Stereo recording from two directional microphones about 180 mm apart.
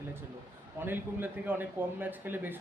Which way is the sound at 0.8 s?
10° right (ahead or behind).